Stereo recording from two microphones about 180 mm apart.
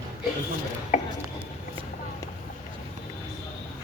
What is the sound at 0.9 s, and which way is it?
Speech, 45° left (ahead or behind).